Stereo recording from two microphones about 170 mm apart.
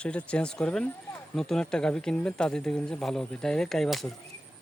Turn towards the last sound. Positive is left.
turn(degrees=0)  # may be behind; listen again after turning